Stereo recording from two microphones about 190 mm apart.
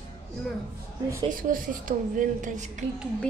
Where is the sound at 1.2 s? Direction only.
45° right (ahead or behind).